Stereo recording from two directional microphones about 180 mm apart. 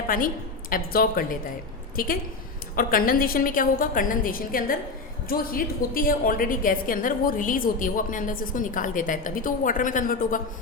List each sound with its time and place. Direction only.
0.7 s a woman's voice: 50° left (ahead or behind)
2.7 s a woman's voice: 50° left (ahead or behind)